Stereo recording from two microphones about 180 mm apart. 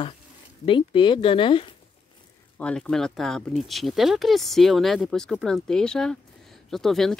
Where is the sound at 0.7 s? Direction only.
30° left (ahead or behind).